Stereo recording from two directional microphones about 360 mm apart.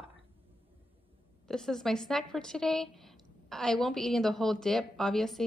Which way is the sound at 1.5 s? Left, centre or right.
Centre.